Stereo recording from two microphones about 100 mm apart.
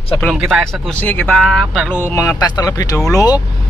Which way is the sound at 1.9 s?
25° left (ahead or behind).